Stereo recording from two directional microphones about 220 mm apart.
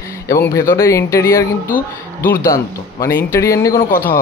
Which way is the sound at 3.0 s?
10° left (ahead or behind).